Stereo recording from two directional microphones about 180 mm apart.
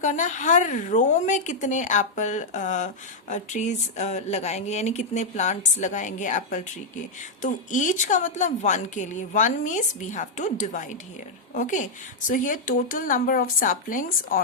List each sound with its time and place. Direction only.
0.0 s a woman's voice: 45° left (ahead or behind)